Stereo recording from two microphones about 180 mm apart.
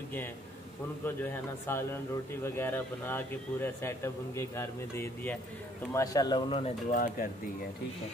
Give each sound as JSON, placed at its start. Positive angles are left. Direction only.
{"t": 1.0, "sound": "a man's voice", "side_deg": 10}
{"t": 6.9, "sound": "speech", "side_deg": 50}